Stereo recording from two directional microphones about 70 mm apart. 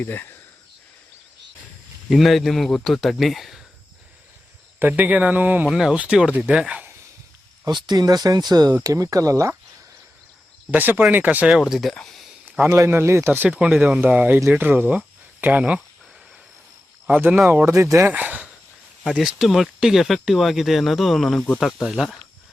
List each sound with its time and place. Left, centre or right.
0.0 s speech: left
2.0 s speech: centre
4.8 s speech: right
5.6 s speech: centre
7.6 s speech: right
8.7 s speech: right
10.7 s speech: right
11.5 s speech: centre
12.6 s speech: right; by 15.8 s centre
17.7 s speech: right
18.1 s a sound: right
19.0 s speech: centre